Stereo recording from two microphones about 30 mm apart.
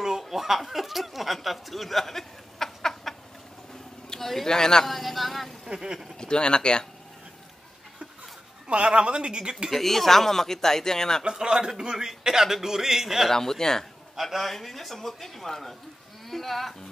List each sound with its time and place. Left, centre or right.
0.2 s a sound: centre
4.2 s a sound: centre
4.5 s speech: centre
4.8 s speech: centre
5.7 s a man's voice: right
6.1 s speech: left
8.6 s a woman's voice: right
9.7 s speech: centre
11.2 s a man's voice: right
13.3 s speech: centre